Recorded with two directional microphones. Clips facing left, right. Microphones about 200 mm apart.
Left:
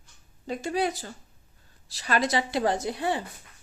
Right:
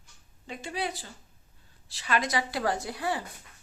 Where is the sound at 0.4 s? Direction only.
45° left (ahead or behind).